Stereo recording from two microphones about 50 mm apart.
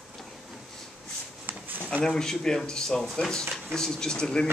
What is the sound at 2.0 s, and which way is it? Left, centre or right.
Speech, centre.